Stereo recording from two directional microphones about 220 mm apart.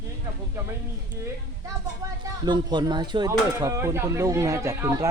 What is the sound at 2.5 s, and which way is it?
Speech, 20° right (ahead or behind).